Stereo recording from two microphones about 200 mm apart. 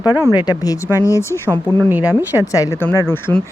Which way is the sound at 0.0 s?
10° right (ahead or behind).